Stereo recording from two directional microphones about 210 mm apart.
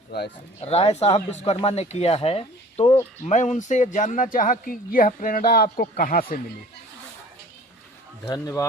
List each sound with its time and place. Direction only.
0.6 s speech: 30° left (ahead or behind)
8.3 s speech: 15° left (ahead or behind)